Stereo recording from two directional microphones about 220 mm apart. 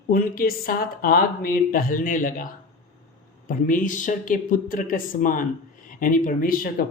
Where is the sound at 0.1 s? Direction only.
40° left (ahead or behind).